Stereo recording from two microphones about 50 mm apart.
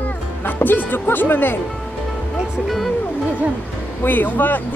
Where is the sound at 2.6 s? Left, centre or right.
Centre.